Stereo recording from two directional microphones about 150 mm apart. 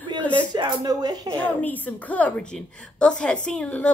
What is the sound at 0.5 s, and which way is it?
Speech, 30° right (ahead or behind).